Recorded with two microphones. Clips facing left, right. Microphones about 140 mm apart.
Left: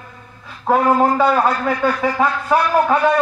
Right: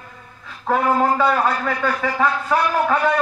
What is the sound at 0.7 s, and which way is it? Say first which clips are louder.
A man's voice: left 3 dB; 20° left (ahead or behind).